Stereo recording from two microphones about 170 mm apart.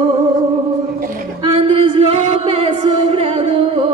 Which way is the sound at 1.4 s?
35° right (ahead or behind).